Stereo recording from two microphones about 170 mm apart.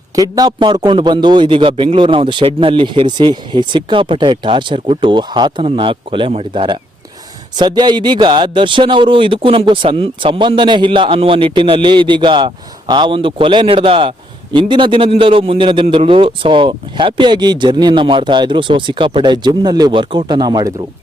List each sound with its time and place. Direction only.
0.2 s a man's voice: 20° right (ahead or behind)